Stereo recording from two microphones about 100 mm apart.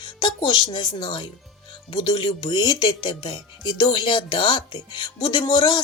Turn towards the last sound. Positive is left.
turn(degrees=50)  # may be behind; listen again after turning